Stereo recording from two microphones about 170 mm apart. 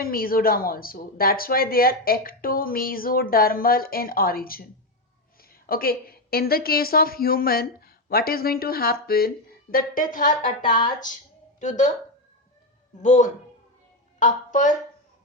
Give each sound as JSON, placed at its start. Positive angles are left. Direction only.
{"t": 0.0, "sound": "a woman's voice", "side_deg": 60}
{"t": 10.7, "sound": "speech", "side_deg": 25}
{"t": 11.6, "sound": "a woman's voice", "side_deg": 45}
{"t": 13.0, "sound": "a woman's voice", "side_deg": 45}